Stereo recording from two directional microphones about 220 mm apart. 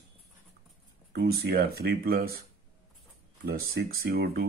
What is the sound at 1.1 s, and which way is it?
Speech, 45° right (ahead or behind).